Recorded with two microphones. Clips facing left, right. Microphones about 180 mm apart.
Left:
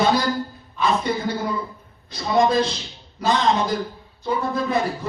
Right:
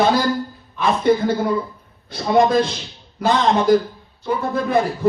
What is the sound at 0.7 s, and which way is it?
Speech, 55° right (ahead or behind).